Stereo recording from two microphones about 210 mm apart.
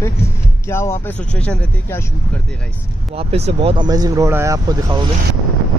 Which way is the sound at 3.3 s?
25° right (ahead or behind).